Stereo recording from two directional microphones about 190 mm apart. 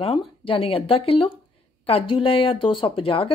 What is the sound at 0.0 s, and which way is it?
A woman's voice, 30° left (ahead or behind).